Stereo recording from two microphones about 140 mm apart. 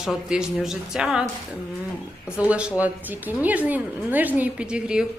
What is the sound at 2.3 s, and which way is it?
Speech, 10° right (ahead or behind).